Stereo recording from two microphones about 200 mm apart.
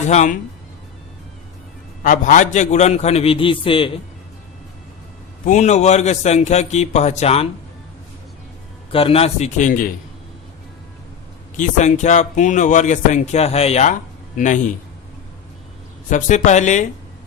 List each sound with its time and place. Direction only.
0.1 s speech: 35° left (ahead or behind)
2.0 s speech: 40° left (ahead or behind)
5.5 s speech: 35° left (ahead or behind)
8.9 s speech: 30° left (ahead or behind)
11.5 s speech: 40° left (ahead or behind)
16.0 s speech: 40° left (ahead or behind)